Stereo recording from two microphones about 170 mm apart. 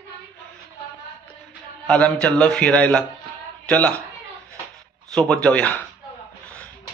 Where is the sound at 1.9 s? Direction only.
5° left (ahead or behind).